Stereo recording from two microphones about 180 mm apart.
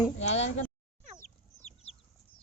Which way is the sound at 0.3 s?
40° left (ahead or behind).